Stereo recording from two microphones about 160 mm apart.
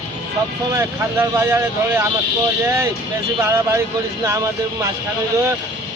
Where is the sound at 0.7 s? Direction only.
20° right (ahead or behind).